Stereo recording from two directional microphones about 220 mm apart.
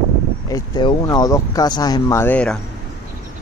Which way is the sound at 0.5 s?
20° left (ahead or behind).